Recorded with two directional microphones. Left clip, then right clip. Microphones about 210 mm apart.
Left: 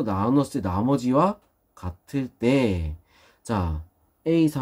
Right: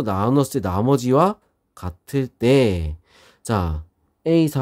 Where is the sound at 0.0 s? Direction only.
55° right (ahead or behind).